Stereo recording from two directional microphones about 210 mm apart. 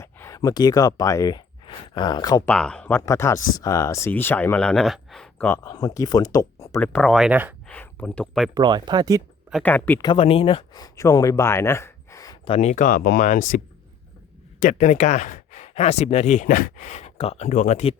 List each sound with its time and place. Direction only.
0.0 s speech: 15° left (ahead or behind)
2.5 s speech: 5° left (ahead or behind)
5.6 s speech: 15° left (ahead or behind)
6.7 s speech: 5° left (ahead or behind)
7.7 s speech: 5° left (ahead or behind)
8.5 s speech: 20° right (ahead or behind)
9.5 s speech: 5° left (ahead or behind)
10.1 s speech: 25° left (ahead or behind)
12.5 s speech: 35° left (ahead or behind)
14.6 s speech: 35° left (ahead or behind)